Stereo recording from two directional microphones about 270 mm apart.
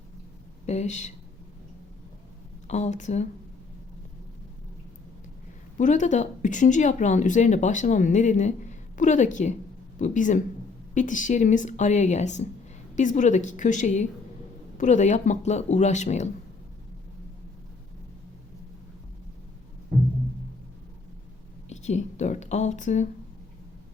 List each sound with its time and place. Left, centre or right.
0.6 s a woman's voice: left
2.6 s a woman's voice: left
5.7 s a woman's voice: left
21.7 s speech: left